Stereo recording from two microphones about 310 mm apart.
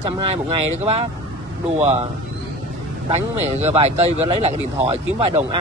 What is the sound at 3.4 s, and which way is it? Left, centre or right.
Speech, right.